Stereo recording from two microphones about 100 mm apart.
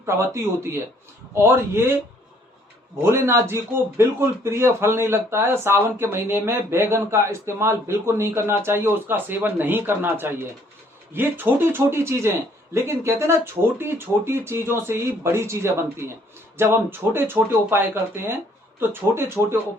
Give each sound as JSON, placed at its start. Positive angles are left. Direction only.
{"t": 0.0, "sound": "speech", "side_deg": -30}
{"t": 3.0, "sound": "speech", "side_deg": -25}